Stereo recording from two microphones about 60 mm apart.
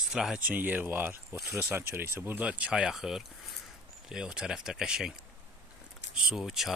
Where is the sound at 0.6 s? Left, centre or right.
Right.